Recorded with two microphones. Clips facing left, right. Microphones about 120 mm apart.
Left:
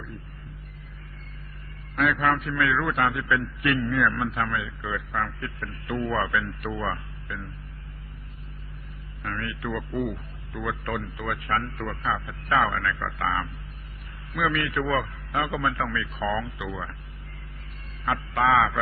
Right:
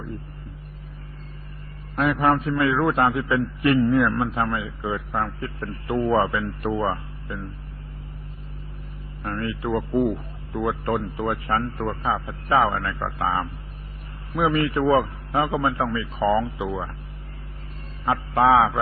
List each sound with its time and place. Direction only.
2.0 s a man's voice: 30° right (ahead or behind)
9.2 s a man's voice: 30° right (ahead or behind)
18.0 s a man's voice: 30° right (ahead or behind)